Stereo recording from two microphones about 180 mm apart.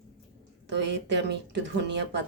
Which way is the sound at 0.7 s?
75° right (ahead or behind).